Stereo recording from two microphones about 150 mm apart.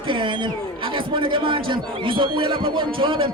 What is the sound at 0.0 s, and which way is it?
A man's voice, 35° right (ahead or behind).